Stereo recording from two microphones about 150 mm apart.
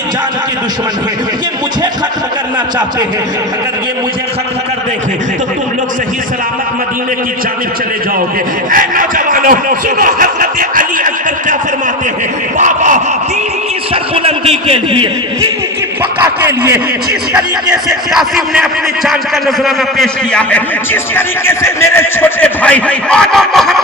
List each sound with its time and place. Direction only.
8.7 s speech: 65° right (ahead or behind)
12.5 s speech: 55° right (ahead or behind)
13.9 s a man's voice: 45° right (ahead or behind)
16.4 s a man's voice: 15° right (ahead or behind)
17.8 s a man's voice: centre (ahead or behind)